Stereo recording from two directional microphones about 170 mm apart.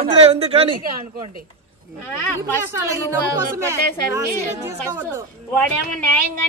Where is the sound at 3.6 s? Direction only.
15° right (ahead or behind).